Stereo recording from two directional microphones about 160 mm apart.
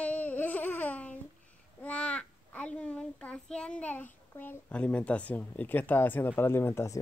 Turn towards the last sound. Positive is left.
turn(degrees=15)  # may be behind; listen again after turning